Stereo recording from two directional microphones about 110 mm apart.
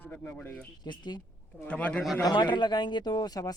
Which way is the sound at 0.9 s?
40° left (ahead or behind).